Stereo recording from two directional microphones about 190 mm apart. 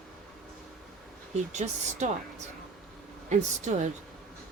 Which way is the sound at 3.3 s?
40° right (ahead or behind).